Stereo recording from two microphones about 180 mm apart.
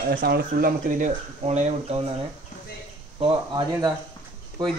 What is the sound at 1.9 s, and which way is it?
Speech, 35° right (ahead or behind).